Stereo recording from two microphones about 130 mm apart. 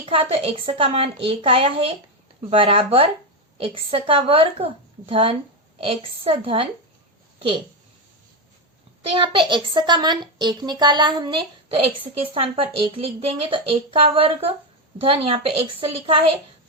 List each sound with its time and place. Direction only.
0.0 s a woman's voice: 45° right (ahead or behind)
9.0 s a woman's voice: 40° right (ahead or behind)